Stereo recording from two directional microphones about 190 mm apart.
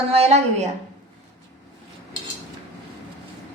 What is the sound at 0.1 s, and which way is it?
Speech, 35° right (ahead or behind).